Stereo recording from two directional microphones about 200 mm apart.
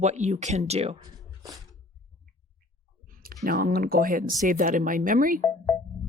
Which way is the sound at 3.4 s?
45° right (ahead or behind).